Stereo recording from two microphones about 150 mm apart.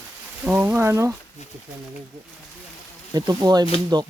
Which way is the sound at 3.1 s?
25° right (ahead or behind).